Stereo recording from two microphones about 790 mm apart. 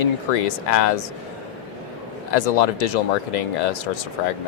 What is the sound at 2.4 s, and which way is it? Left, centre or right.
Speech, left.